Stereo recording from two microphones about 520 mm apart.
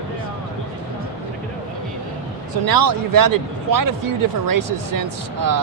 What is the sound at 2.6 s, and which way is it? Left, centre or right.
Speech, right.